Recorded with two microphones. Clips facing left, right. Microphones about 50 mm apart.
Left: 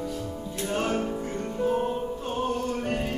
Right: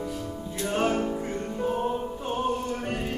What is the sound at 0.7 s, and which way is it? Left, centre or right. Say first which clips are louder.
Music: right 2 dB; centre.